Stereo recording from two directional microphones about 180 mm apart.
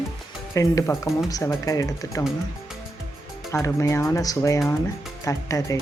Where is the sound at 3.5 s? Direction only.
15° left (ahead or behind).